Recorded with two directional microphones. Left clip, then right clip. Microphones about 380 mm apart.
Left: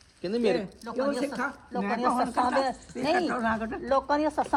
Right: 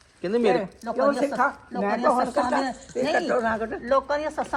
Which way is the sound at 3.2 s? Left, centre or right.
Centre.